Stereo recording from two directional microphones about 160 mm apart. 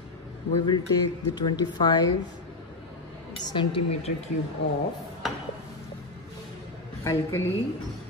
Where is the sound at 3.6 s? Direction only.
35° left (ahead or behind).